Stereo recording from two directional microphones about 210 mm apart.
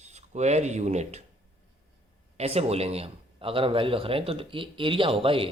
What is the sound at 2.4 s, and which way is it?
Speech, 30° right (ahead or behind).